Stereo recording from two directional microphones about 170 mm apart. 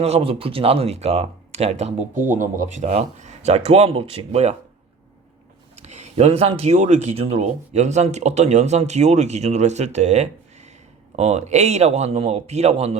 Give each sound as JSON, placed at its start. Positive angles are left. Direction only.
{"t": 0.0, "sound": "speech", "side_deg": -35}
{"t": 5.7, "sound": "speech", "side_deg": -40}